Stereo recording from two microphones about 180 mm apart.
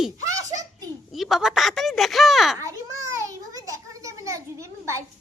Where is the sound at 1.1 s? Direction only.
Centre (ahead or behind).